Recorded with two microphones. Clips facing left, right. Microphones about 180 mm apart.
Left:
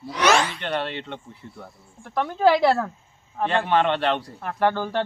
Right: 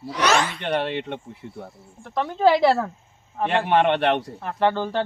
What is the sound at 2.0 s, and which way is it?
A man's voice, centre (ahead or behind).